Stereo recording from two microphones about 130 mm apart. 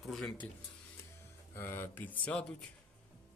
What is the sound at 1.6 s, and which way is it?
Speech, 20° left (ahead or behind).